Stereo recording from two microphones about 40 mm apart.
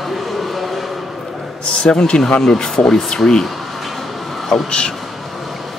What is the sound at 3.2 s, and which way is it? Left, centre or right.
Speech, centre.